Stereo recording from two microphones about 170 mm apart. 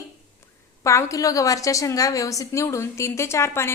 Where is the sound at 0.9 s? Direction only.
20° left (ahead or behind).